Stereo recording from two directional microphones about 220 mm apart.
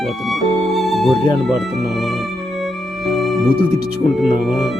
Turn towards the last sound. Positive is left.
turn(degrees=0)  # may be behind; listen again after turning